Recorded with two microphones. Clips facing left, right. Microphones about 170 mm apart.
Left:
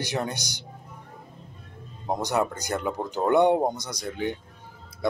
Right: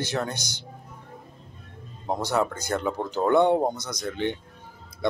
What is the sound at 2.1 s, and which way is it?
Speech, 15° left (ahead or behind).